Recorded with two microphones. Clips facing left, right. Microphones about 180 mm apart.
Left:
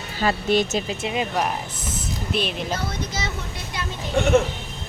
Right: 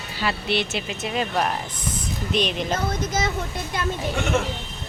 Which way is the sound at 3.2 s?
50° right (ahead or behind).